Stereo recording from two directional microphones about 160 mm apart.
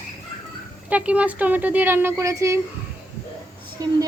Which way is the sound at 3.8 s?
25° right (ahead or behind).